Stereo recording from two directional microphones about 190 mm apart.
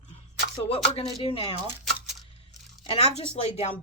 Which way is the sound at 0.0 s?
30° left (ahead or behind).